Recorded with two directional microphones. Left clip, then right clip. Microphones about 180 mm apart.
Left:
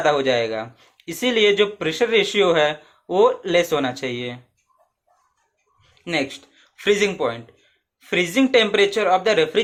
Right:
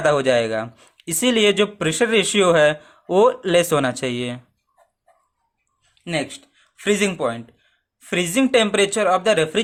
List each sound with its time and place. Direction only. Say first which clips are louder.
0.0 s speech: right 1 dB; 45° right (ahead or behind)
5.9 s speech: left 1 dB; 25° right (ahead or behind)